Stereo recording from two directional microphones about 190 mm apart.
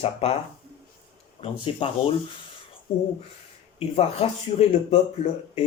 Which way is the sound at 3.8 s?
30° left (ahead or behind).